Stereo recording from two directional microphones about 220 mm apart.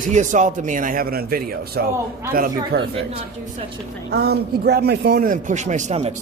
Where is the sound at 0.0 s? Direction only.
35° right (ahead or behind).